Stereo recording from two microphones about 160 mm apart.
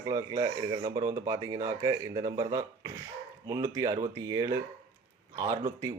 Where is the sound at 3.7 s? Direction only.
20° right (ahead or behind).